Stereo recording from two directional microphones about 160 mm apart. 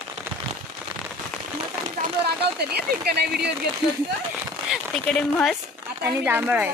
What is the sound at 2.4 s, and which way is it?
Speech, 90° right.